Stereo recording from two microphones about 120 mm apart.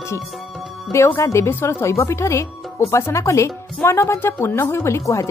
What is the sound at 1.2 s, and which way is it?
Speech, 25° left (ahead or behind).